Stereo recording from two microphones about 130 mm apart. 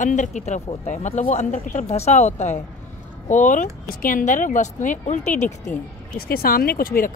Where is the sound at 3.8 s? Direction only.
90° left; by 5.8 s 70° left (ahead or behind).